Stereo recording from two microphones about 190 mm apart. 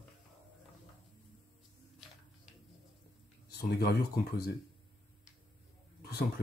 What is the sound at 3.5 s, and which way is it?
Speech, 55° left (ahead or behind).